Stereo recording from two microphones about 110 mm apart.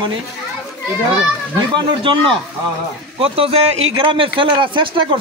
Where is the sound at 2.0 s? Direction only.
55° right (ahead or behind).